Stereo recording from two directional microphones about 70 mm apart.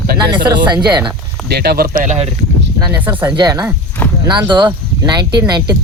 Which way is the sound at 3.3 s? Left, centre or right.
Right.